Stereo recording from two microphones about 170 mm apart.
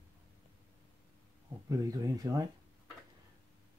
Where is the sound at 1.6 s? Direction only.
20° right (ahead or behind).